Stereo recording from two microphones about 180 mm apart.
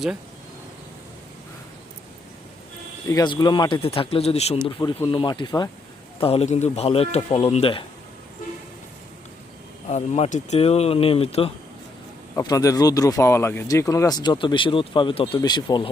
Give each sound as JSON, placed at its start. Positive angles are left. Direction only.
{"t": 3.1, "sound": "speech", "side_deg": 20}
{"t": 9.9, "sound": "speech", "side_deg": 40}
{"t": 12.4, "sound": "speech", "side_deg": 20}